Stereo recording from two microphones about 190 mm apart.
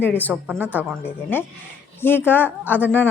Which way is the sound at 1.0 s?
10° left (ahead or behind).